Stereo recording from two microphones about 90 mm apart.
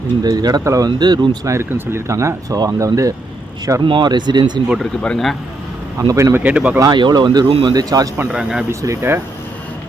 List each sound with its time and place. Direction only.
0.2 s speech: 50° right (ahead or behind)
0.6 s speech: 35° right (ahead or behind)
0.9 s speech: 50° right (ahead or behind)
1.5 s speech: 30° right (ahead or behind)
3.8 s speech: 60° right (ahead or behind)
4.8 s speech: 5° left (ahead or behind)
6.0 s speech: 40° right (ahead or behind)
6.3 s speech: 15° right (ahead or behind)
6.9 s speech: 55° right (ahead or behind)
8.3 s speech: 10° right (ahead or behind)
9.0 s speech: 25° right (ahead or behind)